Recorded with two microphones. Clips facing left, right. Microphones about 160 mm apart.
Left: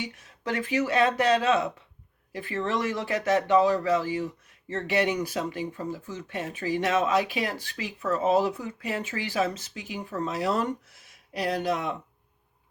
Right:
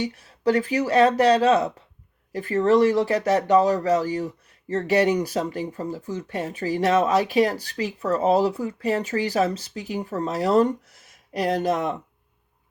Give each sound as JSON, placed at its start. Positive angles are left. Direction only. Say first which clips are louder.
{"t": 0.0, "sound": "speech", "louder": "right 11 dB", "side_deg": -35}